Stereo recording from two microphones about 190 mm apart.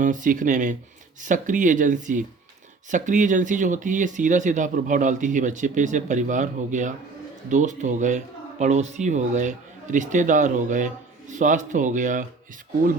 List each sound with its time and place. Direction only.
0.0 s speech: 45° right (ahead or behind)